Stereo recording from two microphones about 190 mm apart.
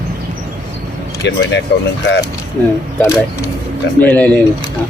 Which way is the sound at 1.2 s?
70° left (ahead or behind).